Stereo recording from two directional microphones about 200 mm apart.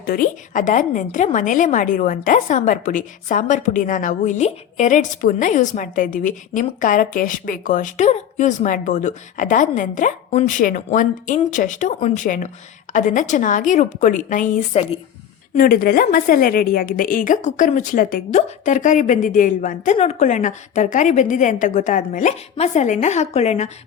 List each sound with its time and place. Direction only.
0.0 s a woman's voice: 45° left (ahead or behind)
15.5 s a woman's voice: 45° left (ahead or behind)